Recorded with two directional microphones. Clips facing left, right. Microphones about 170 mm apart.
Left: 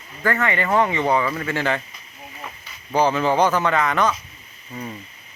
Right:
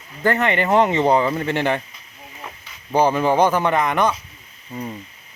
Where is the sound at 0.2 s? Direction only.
20° right (ahead or behind).